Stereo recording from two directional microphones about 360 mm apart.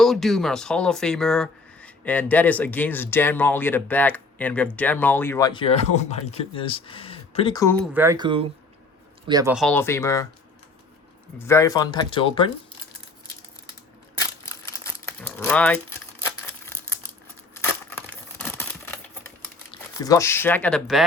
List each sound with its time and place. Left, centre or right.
0.0 s speech: centre
11.3 s speech: centre
14.2 s crumpling: centre
17.6 s a sound: centre
20.0 s speech: centre